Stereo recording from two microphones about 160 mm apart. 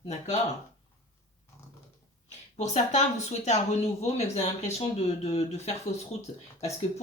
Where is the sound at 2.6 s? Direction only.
45° left (ahead or behind).